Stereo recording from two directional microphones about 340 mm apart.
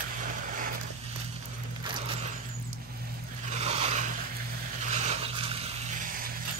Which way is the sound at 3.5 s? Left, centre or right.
Centre.